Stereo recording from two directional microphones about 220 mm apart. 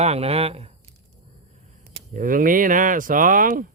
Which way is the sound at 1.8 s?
45° right (ahead or behind).